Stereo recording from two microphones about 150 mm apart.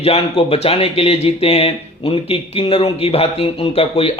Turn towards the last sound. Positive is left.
turn(degrees=40)  # may be behind; listen again after turning